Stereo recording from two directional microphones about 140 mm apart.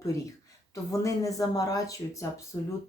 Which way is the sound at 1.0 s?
25° left (ahead or behind).